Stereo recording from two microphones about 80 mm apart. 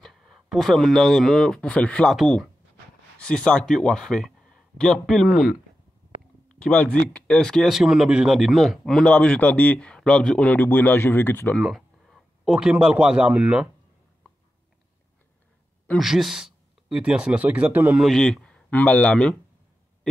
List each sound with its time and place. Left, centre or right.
0.0 s speech: centre
3.2 s speech: centre
6.6 s speech: centre
7.7 s speech: centre
8.9 s speech: centre
11.5 s a sound: centre
12.5 s speech: centre
16.0 s speech: centre
18.1 s speech: centre
18.7 s speech: centre